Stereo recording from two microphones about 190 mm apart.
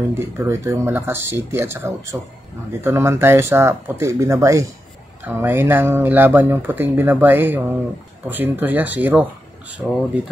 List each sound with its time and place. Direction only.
0.1 s speech: 15° right (ahead or behind)